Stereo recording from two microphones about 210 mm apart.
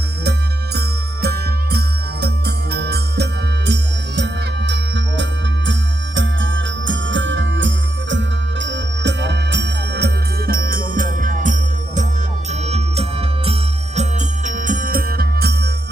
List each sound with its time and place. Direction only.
0.3 s music: 50° right (ahead or behind)